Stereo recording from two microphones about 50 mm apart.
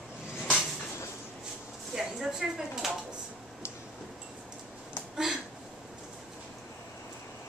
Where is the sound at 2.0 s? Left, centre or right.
Centre.